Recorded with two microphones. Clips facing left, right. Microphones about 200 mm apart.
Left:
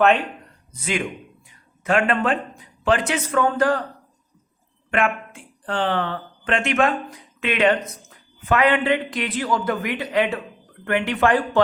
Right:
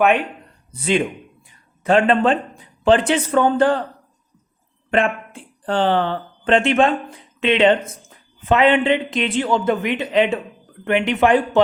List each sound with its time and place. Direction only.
0.8 s a man's voice: 30° right (ahead or behind)
4.9 s a man's voice: 30° right (ahead or behind)